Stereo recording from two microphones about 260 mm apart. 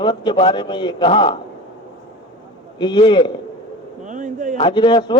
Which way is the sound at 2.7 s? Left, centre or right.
Centre.